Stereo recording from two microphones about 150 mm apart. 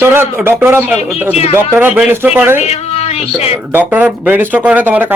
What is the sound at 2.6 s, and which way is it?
Speech, 45° left (ahead or behind).